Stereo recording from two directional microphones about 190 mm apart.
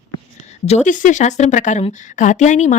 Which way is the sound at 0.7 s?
40° left (ahead or behind).